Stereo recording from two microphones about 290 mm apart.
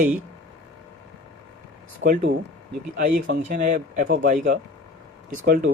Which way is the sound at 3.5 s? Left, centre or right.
Right.